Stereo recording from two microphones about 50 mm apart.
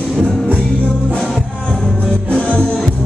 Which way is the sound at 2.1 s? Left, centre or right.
Left.